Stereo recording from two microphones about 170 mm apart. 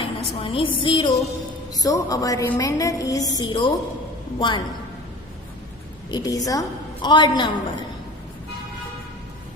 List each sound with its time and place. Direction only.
0.0 s a woman's voice: 30° left (ahead or behind)
6.1 s a woman's voice: 20° left (ahead or behind)